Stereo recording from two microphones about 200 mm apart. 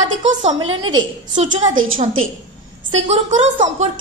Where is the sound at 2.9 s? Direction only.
35° right (ahead or behind).